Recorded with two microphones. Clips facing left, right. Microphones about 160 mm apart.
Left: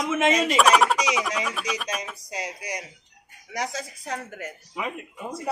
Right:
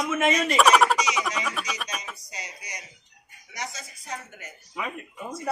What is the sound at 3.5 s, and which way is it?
Speech, 90° left.